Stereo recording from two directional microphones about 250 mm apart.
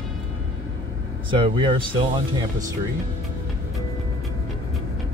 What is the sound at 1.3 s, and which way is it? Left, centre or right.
Speech, centre.